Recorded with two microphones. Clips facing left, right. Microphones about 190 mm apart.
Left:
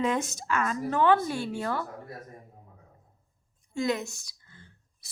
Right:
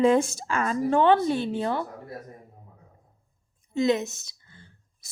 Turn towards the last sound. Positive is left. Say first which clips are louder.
# right 1 dB
turn(degrees=-25)  # may be behind; listen again after turning